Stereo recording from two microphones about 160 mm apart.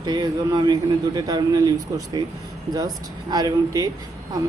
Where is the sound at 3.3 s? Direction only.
25° right (ahead or behind).